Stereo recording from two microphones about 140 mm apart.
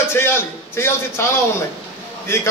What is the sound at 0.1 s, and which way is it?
A man's voice, 15° left (ahead or behind).